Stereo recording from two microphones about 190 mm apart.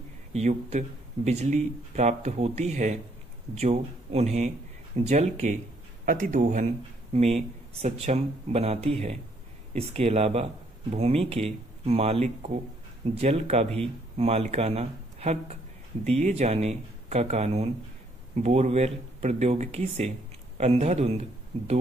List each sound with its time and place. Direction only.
0.3 s a man's voice: 35° right (ahead or behind)